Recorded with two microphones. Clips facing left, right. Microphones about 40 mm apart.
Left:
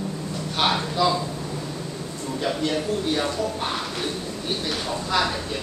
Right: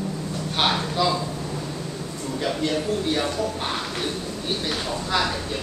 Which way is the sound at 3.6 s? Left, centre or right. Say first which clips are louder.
Even; centre.